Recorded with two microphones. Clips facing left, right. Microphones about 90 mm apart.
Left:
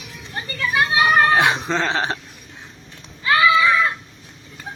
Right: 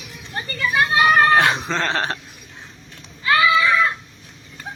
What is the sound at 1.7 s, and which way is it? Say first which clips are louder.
Speech: left 1 dB; 10° left (ahead or behind).